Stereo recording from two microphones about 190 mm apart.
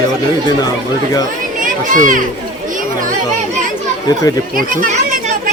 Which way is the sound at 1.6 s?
45° right (ahead or behind).